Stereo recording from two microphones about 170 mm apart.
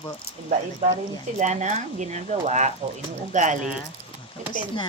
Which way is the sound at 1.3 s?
45° right (ahead or behind).